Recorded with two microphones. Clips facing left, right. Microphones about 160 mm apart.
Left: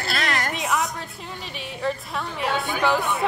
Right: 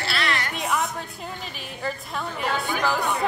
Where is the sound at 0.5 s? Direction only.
Centre (ahead or behind).